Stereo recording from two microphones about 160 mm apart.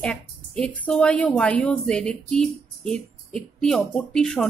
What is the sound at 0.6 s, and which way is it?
A woman's voice, 5° left (ahead or behind).